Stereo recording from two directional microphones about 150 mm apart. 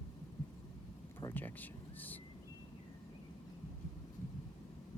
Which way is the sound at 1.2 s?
15° left (ahead or behind).